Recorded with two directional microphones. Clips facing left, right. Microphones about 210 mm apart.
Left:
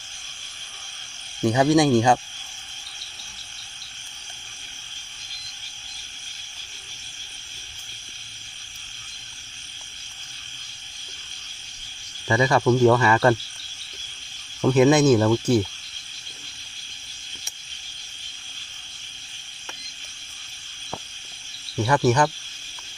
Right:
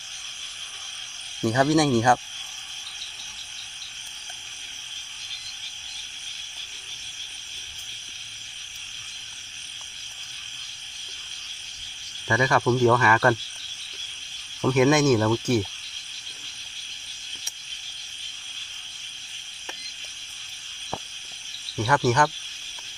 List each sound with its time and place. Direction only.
1.4 s speech: 15° left (ahead or behind)
12.3 s speech: 25° left (ahead or behind)
14.6 s speech: 30° left (ahead or behind)
21.8 s speech: 25° left (ahead or behind)